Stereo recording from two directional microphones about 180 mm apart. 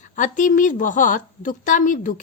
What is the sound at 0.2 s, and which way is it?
A woman's voice, 45° left (ahead or behind).